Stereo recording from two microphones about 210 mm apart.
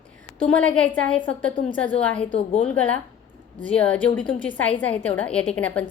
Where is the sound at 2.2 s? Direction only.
30° left (ahead or behind).